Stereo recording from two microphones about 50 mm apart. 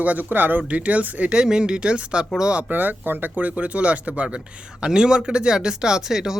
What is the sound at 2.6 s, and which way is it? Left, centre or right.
Speech, right.